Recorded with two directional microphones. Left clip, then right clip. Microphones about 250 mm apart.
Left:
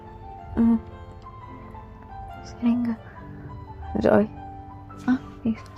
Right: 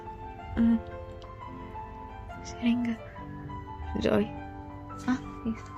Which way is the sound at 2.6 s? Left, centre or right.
Centre.